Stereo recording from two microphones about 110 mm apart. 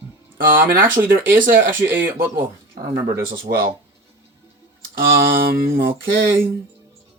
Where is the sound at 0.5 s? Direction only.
20° right (ahead or behind).